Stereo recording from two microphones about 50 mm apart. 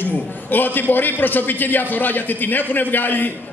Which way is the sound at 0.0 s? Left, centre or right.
Left.